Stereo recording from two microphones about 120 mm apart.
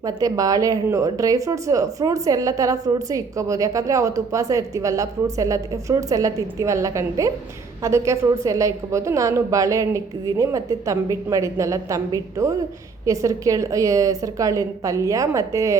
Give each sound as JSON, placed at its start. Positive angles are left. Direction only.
{"t": 0.0, "sound": "speech", "side_deg": -30}